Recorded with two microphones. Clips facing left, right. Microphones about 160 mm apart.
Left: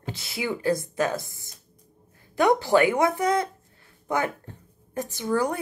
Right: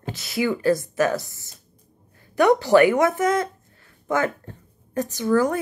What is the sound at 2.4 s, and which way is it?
Speech, 15° left (ahead or behind).